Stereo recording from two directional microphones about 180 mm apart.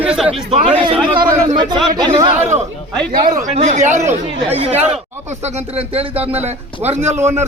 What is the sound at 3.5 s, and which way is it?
A man's voice, 40° right (ahead or behind).